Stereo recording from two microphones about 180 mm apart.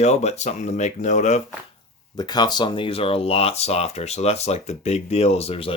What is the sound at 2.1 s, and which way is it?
Speech, 25° left (ahead or behind).